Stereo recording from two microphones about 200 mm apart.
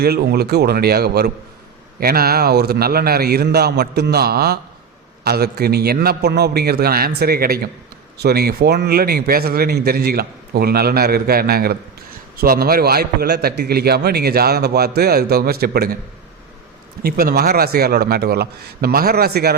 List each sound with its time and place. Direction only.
0.0 s a man's voice: 50° right (ahead or behind)
17.0 s a man's voice: 50° right (ahead or behind)